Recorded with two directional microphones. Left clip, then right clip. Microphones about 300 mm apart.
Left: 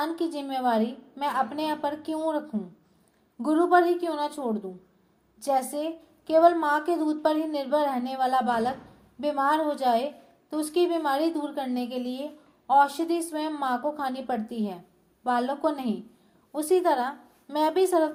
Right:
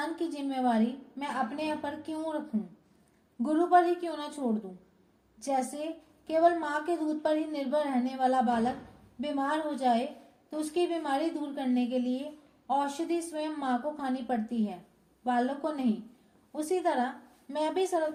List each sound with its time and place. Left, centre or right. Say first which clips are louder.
0.0 s a sound: left 5 dB; left
1.2 s a woman's voice: left 6 dB; left
3.4 s a woman's voice: left 3 dB; left